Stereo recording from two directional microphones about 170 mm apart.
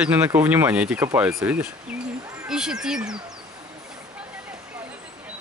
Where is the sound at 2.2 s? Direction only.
20° right (ahead or behind).